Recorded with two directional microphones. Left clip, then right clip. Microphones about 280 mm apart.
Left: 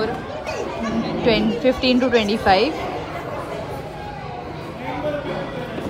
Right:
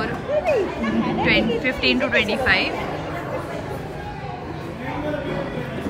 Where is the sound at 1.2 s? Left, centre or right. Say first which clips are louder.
Left 3 dB; centre.